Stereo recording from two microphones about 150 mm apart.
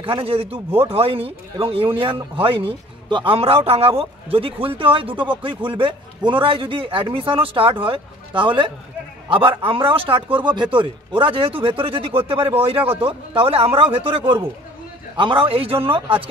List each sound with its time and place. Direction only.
0.0 s a man's voice: 35° right (ahead or behind)